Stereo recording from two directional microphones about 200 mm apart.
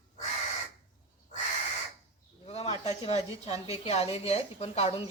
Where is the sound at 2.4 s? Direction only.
30° left (ahead or behind).